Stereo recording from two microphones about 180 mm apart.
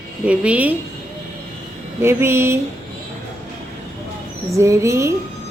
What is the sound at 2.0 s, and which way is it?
Speech, 15° right (ahead or behind).